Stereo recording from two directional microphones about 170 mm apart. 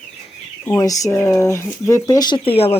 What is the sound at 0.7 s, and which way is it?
Speech, 20° left (ahead or behind).